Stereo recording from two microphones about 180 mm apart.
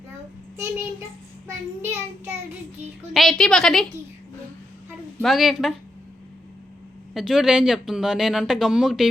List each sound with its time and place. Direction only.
1.8 s child singing: 15° right (ahead or behind)
3.1 s speech: centre (ahead or behind)
5.2 s speech: centre (ahead or behind)
7.1 s speech: centre (ahead or behind)